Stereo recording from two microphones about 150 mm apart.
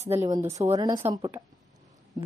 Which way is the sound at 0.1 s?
20° right (ahead or behind).